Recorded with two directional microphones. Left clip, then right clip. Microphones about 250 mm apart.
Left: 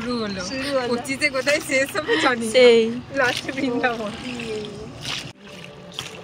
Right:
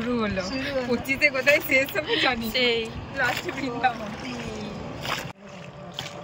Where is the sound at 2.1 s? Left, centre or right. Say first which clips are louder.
Left 4 dB; centre.